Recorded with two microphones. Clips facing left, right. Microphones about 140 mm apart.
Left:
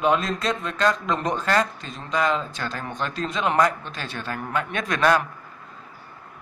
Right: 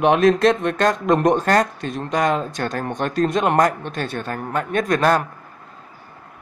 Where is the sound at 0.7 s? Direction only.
50° right (ahead or behind).